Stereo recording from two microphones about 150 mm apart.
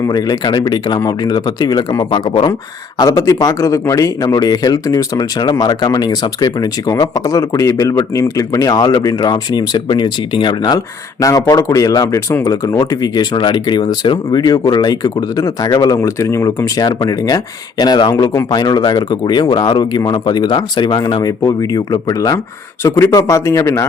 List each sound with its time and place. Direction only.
0.0 s speech: 25° left (ahead or behind)
3.0 s speech: 20° left (ahead or behind)